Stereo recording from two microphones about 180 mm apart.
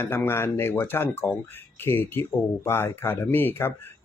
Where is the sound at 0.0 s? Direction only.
15° left (ahead or behind).